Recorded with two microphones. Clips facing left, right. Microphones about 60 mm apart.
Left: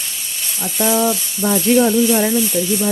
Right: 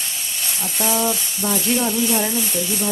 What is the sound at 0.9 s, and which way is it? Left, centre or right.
Speech, left.